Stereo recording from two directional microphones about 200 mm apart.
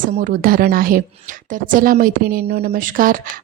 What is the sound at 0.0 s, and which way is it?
A woman's voice, 35° right (ahead or behind).